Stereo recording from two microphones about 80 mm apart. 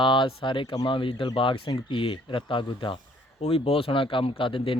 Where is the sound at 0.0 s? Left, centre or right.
Left.